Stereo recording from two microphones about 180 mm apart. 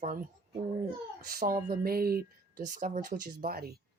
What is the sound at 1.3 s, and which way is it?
Speech, 55° right (ahead or behind).